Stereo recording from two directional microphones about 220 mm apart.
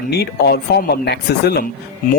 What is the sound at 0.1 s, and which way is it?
Speech, 45° left (ahead or behind).